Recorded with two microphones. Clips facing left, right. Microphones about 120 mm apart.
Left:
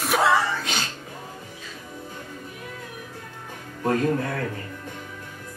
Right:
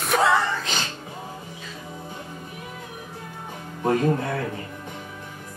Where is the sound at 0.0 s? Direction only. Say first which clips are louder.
Even; centre (ahead or behind).